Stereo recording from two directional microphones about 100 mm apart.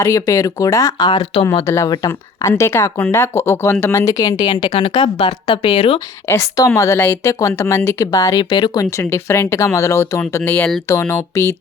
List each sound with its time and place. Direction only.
0.0 s speech: 35° left (ahead or behind)
1.6 s speech: 30° left (ahead or behind); by 6.0 s 65° left (ahead or behind)
6.2 s speech: 35° left (ahead or behind)